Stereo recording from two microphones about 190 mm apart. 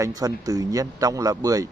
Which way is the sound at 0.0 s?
20° right (ahead or behind).